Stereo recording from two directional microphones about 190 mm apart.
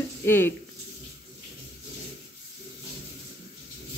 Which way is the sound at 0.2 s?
10° left (ahead or behind).